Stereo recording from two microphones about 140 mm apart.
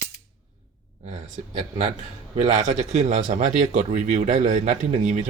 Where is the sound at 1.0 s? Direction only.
60° right (ahead or behind).